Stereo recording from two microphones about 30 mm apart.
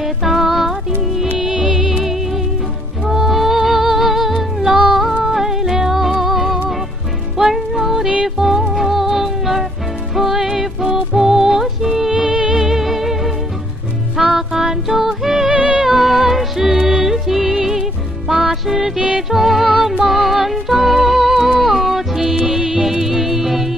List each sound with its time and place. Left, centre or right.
0.0 s music: centre
3.1 s music: centre
12.3 s music: right
12.5 s music: centre
15.5 s music: right
15.8 s music: centre
18.9 s music: right
19.3 s music: centre